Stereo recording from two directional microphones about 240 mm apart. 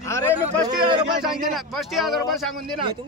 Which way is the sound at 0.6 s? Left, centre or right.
Centre.